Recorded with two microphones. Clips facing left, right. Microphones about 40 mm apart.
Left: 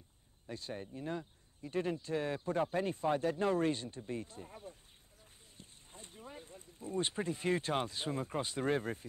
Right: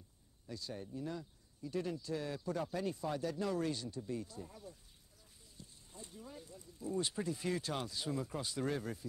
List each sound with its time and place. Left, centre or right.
0.5 s speech: left